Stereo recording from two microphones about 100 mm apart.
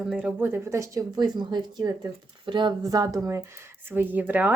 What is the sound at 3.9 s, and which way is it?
Speech, 20° right (ahead or behind).